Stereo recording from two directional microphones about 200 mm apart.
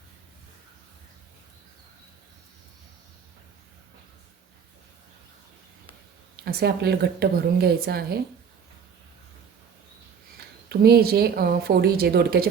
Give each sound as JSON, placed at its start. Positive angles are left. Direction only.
{"t": 6.4, "sound": "speech", "side_deg": -55}
{"t": 10.7, "sound": "speech", "side_deg": -50}